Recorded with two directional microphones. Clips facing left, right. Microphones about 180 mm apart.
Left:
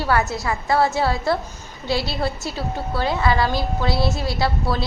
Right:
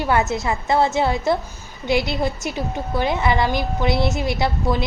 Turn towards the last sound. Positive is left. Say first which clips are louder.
# right 1 dB
turn(degrees=-20)  # may be behind; listen again after turning